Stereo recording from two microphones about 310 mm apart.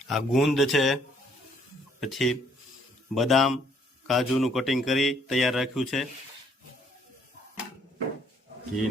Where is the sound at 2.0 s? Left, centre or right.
Centre.